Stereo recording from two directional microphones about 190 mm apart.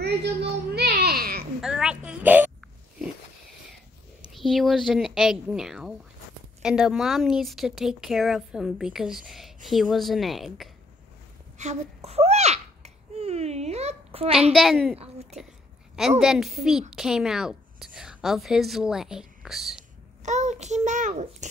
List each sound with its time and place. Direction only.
0.0 s a sound: 60° right (ahead or behind)
1.6 s a woman's voice: 5° right (ahead or behind)
4.3 s speech: centre (ahead or behind)
11.5 s babbling: 35° right (ahead or behind)
14.5 s speech: centre (ahead or behind)
15.3 s a child's voice: 35° right (ahead or behind)
16.2 s a woman's voice: centre (ahead or behind)
20.2 s a child's voice: 35° right (ahead or behind)